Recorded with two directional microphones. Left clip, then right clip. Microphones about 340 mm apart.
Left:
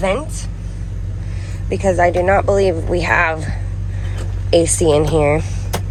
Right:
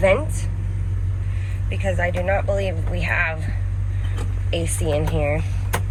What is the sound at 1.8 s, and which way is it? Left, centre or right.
Speech, left.